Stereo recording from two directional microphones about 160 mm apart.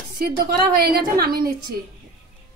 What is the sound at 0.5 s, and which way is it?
Speech, 70° right (ahead or behind).